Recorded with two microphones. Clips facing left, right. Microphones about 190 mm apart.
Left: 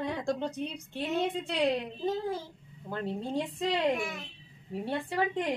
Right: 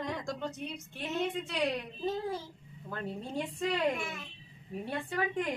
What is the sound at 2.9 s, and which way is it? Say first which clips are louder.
Speech: left 4 dB; 30° left (ahead or behind).